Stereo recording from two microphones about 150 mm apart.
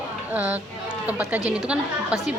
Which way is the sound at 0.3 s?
10° right (ahead or behind).